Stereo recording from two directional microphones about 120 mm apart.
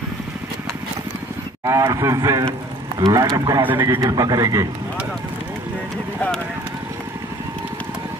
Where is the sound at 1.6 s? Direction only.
25° right (ahead or behind).